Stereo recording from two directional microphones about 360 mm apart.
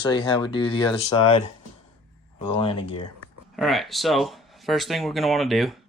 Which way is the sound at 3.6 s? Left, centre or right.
Centre.